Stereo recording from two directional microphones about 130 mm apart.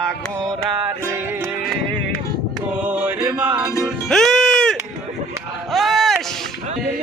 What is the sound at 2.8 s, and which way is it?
Mantra, 10° right (ahead or behind).